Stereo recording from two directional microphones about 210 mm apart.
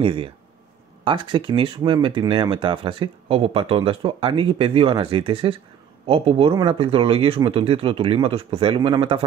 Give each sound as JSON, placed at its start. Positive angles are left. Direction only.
{"t": 0.0, "sound": "speech", "side_deg": -25}